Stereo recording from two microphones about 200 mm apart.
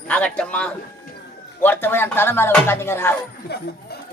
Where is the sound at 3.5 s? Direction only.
55° left (ahead or behind).